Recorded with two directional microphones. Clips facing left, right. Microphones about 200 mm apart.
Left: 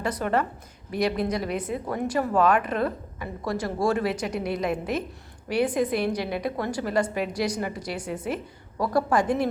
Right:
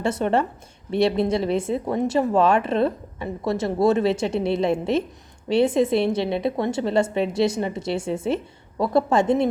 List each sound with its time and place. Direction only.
0.0 s a woman's voice: 25° right (ahead or behind)